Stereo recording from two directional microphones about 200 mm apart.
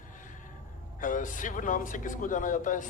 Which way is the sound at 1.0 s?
40° left (ahead or behind).